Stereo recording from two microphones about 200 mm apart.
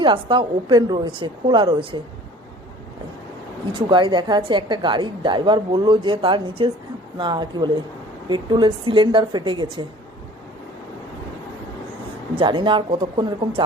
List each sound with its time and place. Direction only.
0.0 s a woman's voice: 25° right (ahead or behind)
3.8 s a woman's voice: 25° right (ahead or behind)
12.4 s a woman's voice: 25° right (ahead or behind)